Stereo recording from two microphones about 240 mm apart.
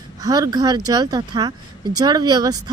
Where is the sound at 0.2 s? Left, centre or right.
Centre.